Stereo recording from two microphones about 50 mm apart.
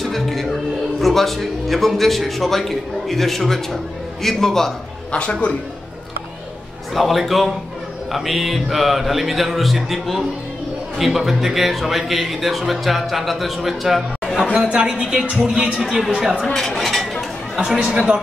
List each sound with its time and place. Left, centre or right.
0.0 s music: centre
1.0 s a man's voice: centre
5.1 s a man's voice: left
6.9 s a man's voice: centre
14.5 s speech: centre
16.1 s speech: centre
16.5 s dishes: centre
17.8 s speech: centre